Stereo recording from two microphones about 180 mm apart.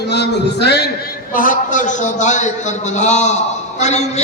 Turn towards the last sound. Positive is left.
turn(degrees=40)  # may be behind; listen again after turning